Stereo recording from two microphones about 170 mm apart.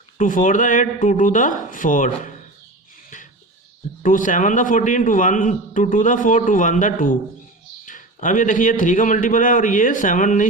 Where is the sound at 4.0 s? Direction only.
50° left (ahead or behind).